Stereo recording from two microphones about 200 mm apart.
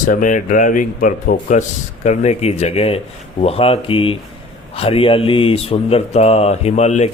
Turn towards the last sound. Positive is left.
turn(degrees=35)  # may be behind; listen again after turning